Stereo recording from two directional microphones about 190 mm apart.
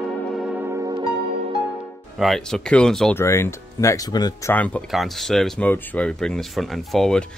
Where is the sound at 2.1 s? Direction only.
Centre (ahead or behind).